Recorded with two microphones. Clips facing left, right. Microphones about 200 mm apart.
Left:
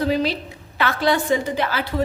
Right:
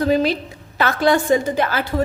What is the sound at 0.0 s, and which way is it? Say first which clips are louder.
A woman's voice: right 3 dB; 50° right (ahead or behind).